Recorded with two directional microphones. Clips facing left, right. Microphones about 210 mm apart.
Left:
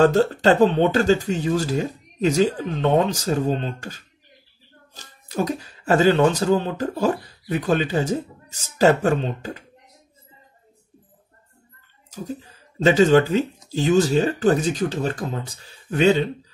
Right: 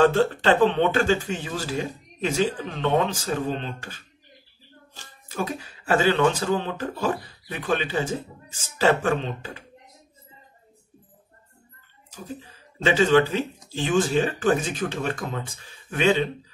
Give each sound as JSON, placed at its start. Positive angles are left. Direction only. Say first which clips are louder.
{"t": 0.0, "sound": "speech", "louder": "left 3 dB", "side_deg": 40}
{"t": 12.1, "sound": "speech", "louder": "left 5 dB", "side_deg": 40}